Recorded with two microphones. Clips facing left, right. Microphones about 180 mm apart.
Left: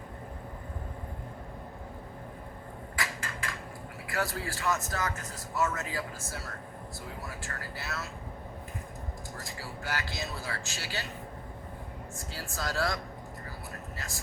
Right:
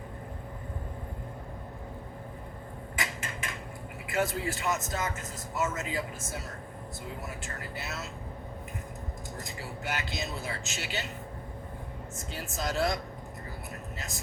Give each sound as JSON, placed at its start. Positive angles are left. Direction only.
{"t": 2.9, "sound": "a sound", "side_deg": -20}
{"t": 4.0, "sound": "speech", "side_deg": -20}
{"t": 9.4, "sound": "speech", "side_deg": -20}
{"t": 12.1, "sound": "speech", "side_deg": -20}